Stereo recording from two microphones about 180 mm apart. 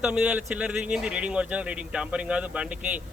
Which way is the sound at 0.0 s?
5° right (ahead or behind).